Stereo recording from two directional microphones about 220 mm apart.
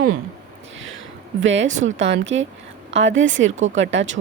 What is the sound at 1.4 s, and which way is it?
Speech, 55° right (ahead or behind).